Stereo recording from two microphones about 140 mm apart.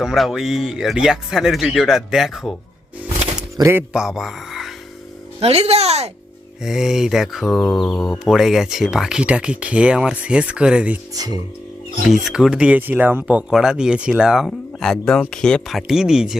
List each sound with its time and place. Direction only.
0.0 s speech: 5° right (ahead or behind)
3.6 s speech: 20° right (ahead or behind)
3.9 s speech: 5° right (ahead or behind)
5.4 s speech: 45° right (ahead or behind)
6.6 s speech: 5° right (ahead or behind)
11.1 s speech: 25° right (ahead or behind)
12.0 s speech: centre (ahead or behind)